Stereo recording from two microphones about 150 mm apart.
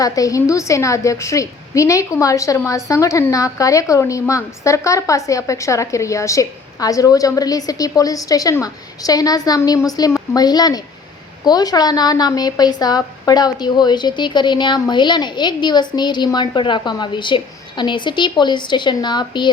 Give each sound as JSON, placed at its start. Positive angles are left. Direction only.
{"t": 0.0, "sound": "a woman's voice", "side_deg": 20}